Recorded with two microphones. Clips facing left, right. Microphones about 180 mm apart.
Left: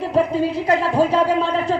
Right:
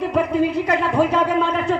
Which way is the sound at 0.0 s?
30° left (ahead or behind).